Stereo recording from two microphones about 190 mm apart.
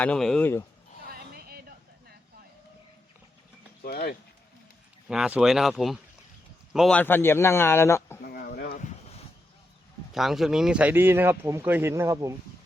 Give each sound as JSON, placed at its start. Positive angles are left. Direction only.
{"t": 0.0, "sound": "speech", "side_deg": 5}
{"t": 1.4, "sound": "a sound", "side_deg": -55}
{"t": 3.8, "sound": "speech", "side_deg": 55}
{"t": 5.0, "sound": "a man's voice", "side_deg": -5}
{"t": 8.2, "sound": "a sound", "side_deg": 50}
{"t": 10.1, "sound": "speech", "side_deg": 0}